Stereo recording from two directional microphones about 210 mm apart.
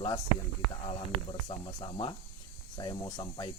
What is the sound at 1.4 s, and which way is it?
Speech, 20° left (ahead or behind).